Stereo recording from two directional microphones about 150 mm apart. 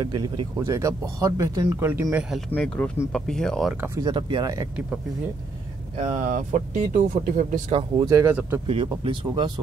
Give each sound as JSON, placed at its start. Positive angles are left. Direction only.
{"t": 0.0, "sound": "speech", "side_deg": -25}
{"t": 2.1, "sound": "speech", "side_deg": -5}
{"t": 2.5, "sound": "speech", "side_deg": 5}
{"t": 3.8, "sound": "speech", "side_deg": -25}
{"t": 5.9, "sound": "speech", "side_deg": -50}
{"t": 7.7, "sound": "speech", "side_deg": -30}
{"t": 8.2, "sound": "speech", "side_deg": -15}
{"t": 8.6, "sound": "speech", "side_deg": -40}